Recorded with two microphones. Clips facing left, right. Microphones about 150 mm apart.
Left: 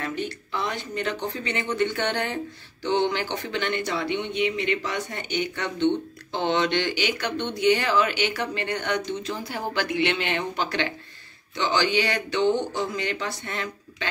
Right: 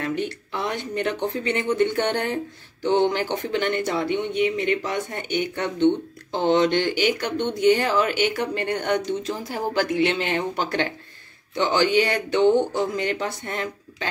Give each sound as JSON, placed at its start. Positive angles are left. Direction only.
{"t": 0.0, "sound": "speech", "side_deg": -60}